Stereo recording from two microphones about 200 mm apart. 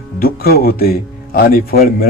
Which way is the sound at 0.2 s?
50° left (ahead or behind).